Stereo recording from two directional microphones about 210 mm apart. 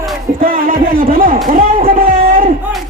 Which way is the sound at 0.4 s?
40° right (ahead or behind).